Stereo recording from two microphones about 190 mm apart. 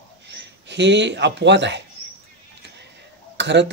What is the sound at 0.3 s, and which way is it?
Speech, 65° right (ahead or behind).